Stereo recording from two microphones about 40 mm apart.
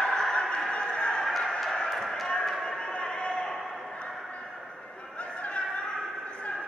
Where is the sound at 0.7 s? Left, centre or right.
Left.